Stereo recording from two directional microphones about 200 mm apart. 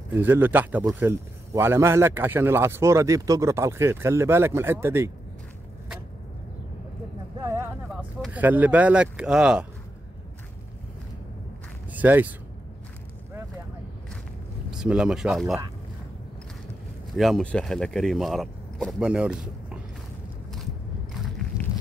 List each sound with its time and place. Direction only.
0.1 s a man's voice: 10° right (ahead or behind)
7.3 s a sound: 15° right (ahead or behind)
7.9 s speech: 5° right (ahead or behind)
11.9 s speech: 10° right (ahead or behind)
14.7 s speech: 5° right (ahead or behind)
17.1 s speech: centre (ahead or behind)